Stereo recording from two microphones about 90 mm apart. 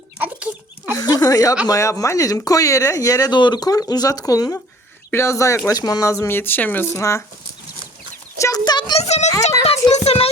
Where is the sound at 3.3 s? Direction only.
55° left (ahead or behind).